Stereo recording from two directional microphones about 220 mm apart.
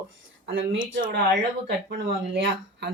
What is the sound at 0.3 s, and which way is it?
Speech, 55° right (ahead or behind).